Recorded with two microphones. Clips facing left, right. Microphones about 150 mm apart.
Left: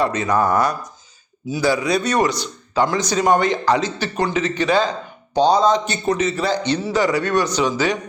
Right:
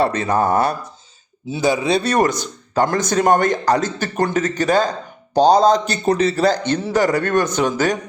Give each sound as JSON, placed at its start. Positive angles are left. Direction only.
{"t": 0.0, "sound": "speech", "side_deg": -30}
{"t": 2.1, "sound": "speech", "side_deg": -45}